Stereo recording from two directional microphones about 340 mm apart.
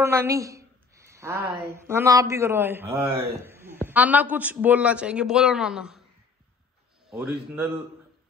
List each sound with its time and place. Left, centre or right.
0.0 s a woman's voice: centre
7.1 s a man's voice: centre